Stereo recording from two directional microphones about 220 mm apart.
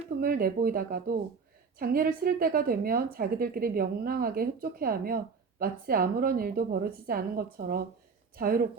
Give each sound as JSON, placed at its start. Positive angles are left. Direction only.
{"t": 0.2, "sound": "a woman's voice", "side_deg": -40}